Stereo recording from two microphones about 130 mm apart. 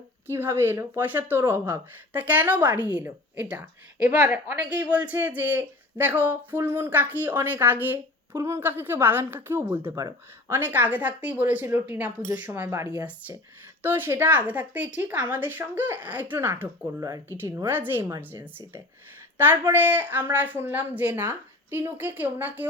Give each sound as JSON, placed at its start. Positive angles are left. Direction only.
{"t": 0.3, "sound": "a woman's voice", "side_deg": -20}
{"t": 19.4, "sound": "a woman's voice", "side_deg": -15}